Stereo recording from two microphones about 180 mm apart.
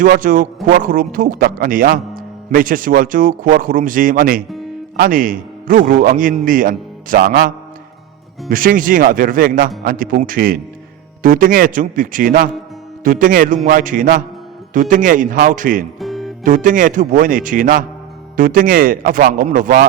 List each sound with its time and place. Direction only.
0.0 s a man's voice: 50° right (ahead or behind)
16.0 s music: centre (ahead or behind)
16.4 s a man's voice: 50° right (ahead or behind)